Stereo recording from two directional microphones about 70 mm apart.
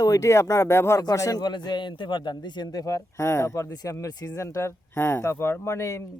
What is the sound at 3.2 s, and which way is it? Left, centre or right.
Speech, left.